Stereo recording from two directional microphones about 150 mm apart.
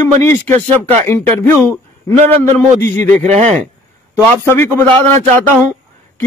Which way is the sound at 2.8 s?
10° left (ahead or behind).